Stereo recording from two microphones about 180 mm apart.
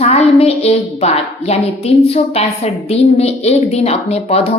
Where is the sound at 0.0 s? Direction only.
35° left (ahead or behind).